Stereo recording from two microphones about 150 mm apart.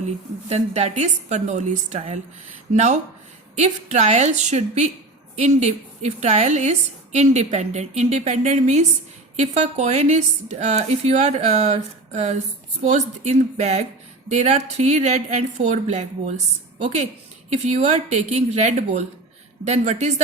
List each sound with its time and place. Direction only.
0.0 s a woman's voice: 45° right (ahead or behind)
17.5 s a woman's voice: 45° right (ahead or behind)